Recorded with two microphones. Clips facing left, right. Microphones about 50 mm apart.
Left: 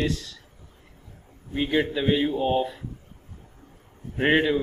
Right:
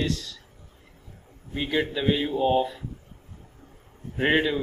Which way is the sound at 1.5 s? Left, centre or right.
Centre.